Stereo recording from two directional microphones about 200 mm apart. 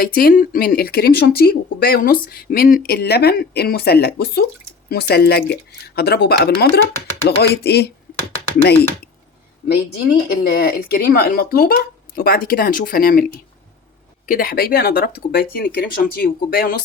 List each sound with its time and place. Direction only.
0.0 s speech: 50° left (ahead or behind)
9.6 s speech: 50° left (ahead or behind)
14.3 s speech: 45° left (ahead or behind)